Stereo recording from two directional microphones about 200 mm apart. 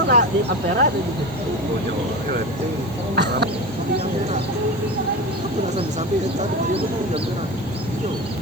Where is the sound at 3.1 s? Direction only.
55° right (ahead or behind).